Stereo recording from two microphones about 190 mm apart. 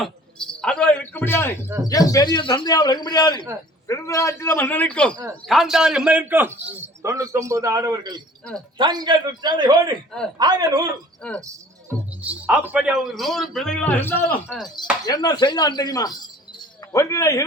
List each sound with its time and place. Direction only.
0.0 s a sound: 5° left (ahead or behind)
1.9 s a man's voice: 20° left (ahead or behind); by 10.0 s 20° right (ahead or behind)
10.1 s speech: 5° left (ahead or behind)
10.3 s a man's voice: 20° right (ahead or behind)
11.2 s speech: 5° left (ahead or behind)
11.4 s speech: 10° right (ahead or behind); by 14.3 s 10° left (ahead or behind)
14.4 s speech: centre (ahead or behind)
15.0 s a man's voice: 20° left (ahead or behind)